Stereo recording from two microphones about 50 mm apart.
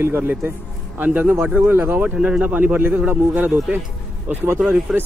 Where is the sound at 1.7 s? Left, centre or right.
Right.